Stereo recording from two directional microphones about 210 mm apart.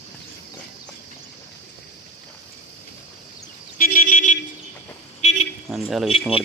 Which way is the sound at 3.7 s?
40° left (ahead or behind).